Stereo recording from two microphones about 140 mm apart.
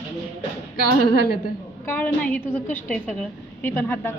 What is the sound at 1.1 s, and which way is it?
Speech, 90° left.